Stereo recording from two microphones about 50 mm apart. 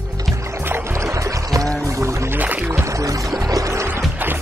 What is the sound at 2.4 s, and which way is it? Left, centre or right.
Music, right.